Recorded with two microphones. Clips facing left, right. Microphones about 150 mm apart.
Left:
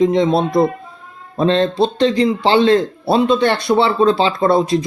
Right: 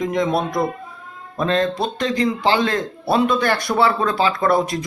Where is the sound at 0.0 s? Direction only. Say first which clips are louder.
Left 6 dB; 25° left (ahead or behind).